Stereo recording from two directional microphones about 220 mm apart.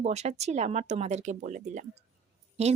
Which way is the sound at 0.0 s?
30° right (ahead or behind).